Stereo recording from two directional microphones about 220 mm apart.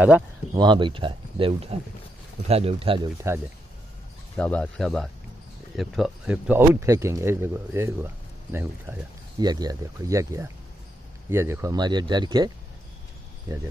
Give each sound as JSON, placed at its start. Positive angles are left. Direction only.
{"t": 0.6, "sound": "speech", "side_deg": -20}
{"t": 4.4, "sound": "speech", "side_deg": 5}